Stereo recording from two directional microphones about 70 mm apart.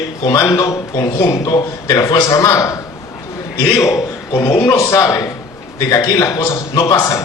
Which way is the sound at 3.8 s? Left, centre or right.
Left.